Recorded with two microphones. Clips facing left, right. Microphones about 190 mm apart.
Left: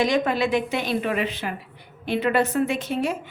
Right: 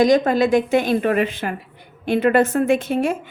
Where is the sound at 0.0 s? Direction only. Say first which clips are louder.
Right 6 dB; 40° right (ahead or behind).